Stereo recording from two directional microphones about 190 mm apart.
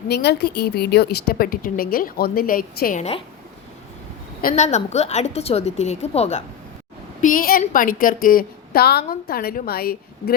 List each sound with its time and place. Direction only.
0.1 s a woman's voice: 60° left (ahead or behind)
3.0 s a woman's voice: 30° left (ahead or behind)
4.4 s a woman's voice: 45° left (ahead or behind)
7.2 s a woman's voice: 45° left (ahead or behind)